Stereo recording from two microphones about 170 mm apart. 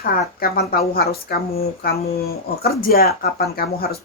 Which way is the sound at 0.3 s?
65° left (ahead or behind).